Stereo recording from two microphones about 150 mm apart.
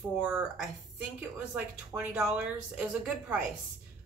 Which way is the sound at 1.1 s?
10° right (ahead or behind).